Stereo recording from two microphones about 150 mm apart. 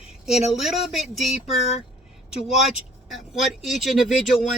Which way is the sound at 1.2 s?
45° left (ahead or behind).